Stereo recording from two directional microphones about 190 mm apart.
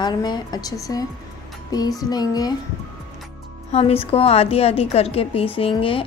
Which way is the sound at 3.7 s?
30° left (ahead or behind).